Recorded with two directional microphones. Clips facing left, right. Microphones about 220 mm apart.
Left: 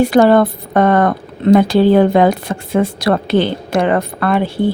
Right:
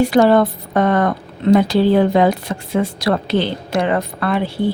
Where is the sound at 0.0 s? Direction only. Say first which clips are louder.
Left 2 dB; 50° left (ahead or behind).